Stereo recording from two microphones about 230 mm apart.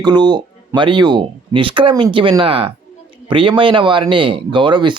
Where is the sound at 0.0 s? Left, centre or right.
Centre.